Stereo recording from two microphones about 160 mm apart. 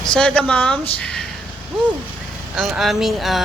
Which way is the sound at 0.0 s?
5° left (ahead or behind).